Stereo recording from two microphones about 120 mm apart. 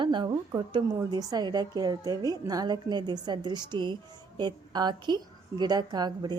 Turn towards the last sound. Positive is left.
turn(degrees=-35)  # may be behind; listen again after turning